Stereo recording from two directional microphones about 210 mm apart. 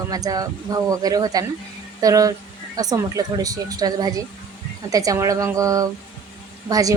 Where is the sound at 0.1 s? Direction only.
15° right (ahead or behind).